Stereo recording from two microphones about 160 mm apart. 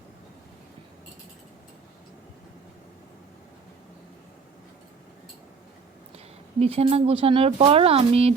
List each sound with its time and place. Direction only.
6.6 s speech: 40° right (ahead or behind)